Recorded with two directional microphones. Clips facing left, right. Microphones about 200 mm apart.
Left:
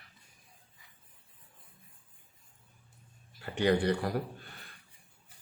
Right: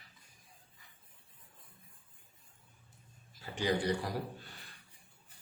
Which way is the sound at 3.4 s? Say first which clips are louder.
Left 5 dB; 60° left (ahead or behind).